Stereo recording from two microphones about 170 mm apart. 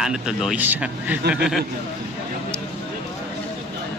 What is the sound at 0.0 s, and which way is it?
Speech, 5° right (ahead or behind).